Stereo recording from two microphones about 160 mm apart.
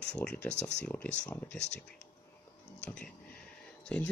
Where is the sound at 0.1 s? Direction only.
10° left (ahead or behind).